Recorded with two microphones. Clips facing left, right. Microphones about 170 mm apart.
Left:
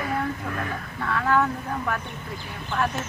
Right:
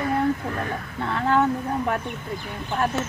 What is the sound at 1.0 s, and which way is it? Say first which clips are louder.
Speech: right 2 dB; 25° right (ahead or behind).